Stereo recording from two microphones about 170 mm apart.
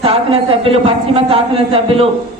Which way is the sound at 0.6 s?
35° right (ahead or behind).